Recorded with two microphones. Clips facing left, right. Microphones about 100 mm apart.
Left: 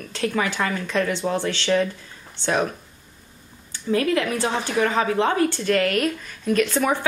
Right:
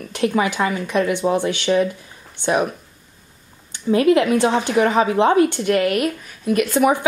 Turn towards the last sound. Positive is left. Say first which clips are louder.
# right 4 dB
turn(degrees=-15)  # may be behind; listen again after turning